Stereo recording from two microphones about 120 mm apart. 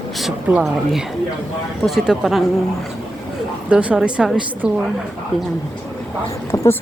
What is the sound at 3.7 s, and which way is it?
Speech, 10° right (ahead or behind).